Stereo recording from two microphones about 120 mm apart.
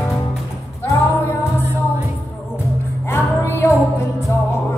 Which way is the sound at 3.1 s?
20° left (ahead or behind).